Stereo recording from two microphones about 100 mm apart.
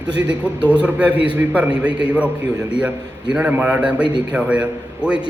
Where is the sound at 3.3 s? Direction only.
15° right (ahead or behind).